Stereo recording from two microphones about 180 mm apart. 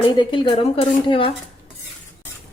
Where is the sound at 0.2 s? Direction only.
25° left (ahead or behind).